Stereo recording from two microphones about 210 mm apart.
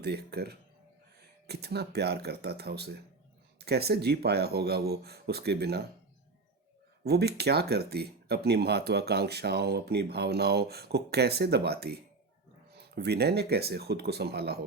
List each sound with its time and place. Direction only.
0.0 s speech: 50° right (ahead or behind)
7.0 s speech: 50° right (ahead or behind)